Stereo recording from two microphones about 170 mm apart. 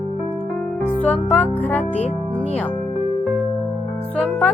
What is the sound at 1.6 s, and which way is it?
Speech, 10° left (ahead or behind).